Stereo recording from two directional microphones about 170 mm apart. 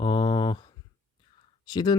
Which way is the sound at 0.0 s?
25° left (ahead or behind).